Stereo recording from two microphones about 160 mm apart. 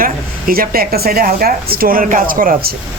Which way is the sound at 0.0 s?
60° right (ahead or behind).